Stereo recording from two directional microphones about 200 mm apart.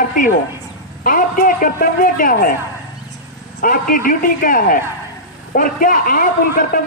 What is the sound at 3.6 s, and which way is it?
A man's voice, 45° left (ahead or behind).